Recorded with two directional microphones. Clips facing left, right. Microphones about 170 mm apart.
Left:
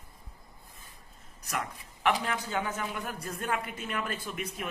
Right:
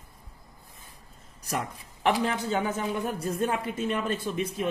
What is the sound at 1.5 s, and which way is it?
Speech, 30° right (ahead or behind).